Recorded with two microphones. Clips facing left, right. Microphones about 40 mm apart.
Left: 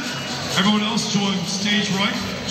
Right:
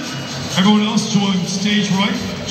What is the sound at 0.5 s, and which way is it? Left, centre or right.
Speech, centre.